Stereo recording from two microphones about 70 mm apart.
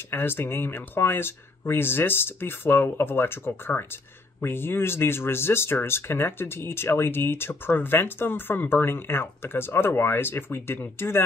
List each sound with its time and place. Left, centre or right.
0.1 s speech: left